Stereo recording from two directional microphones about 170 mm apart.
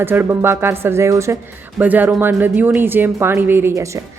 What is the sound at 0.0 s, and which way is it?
A woman's voice, 15° right (ahead or behind).